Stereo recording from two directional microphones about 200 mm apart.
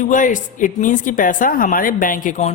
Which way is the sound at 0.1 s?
40° left (ahead or behind).